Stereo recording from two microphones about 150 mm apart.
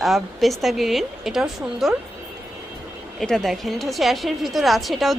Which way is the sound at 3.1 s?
Centre (ahead or behind).